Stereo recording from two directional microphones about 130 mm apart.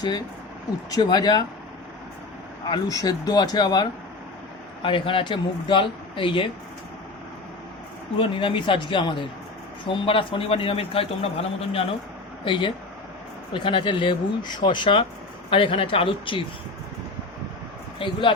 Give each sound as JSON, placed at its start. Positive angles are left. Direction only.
{"t": 0.9, "sound": "speech", "side_deg": 30}
{"t": 2.6, "sound": "speech", "side_deg": 30}
{"t": 8.2, "sound": "a man's voice", "side_deg": 40}
{"t": 18.0, "sound": "speech", "side_deg": 40}